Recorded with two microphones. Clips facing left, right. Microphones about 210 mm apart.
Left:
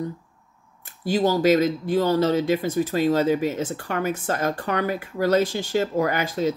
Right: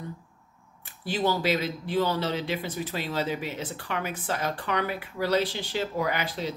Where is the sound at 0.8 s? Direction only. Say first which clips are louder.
Left 6 dB; 40° left (ahead or behind).